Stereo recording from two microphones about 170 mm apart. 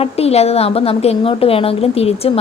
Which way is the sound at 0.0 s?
35° left (ahead or behind).